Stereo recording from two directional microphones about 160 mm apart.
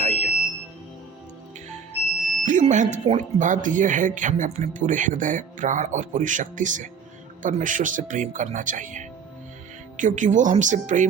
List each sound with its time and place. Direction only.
0.0 s music: 45° right (ahead or behind)
2.4 s speech: 50° right (ahead or behind)